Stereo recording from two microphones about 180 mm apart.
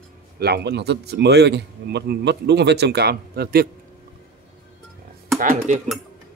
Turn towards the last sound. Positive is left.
turn(degrees=-45)  # may be behind; listen again after turning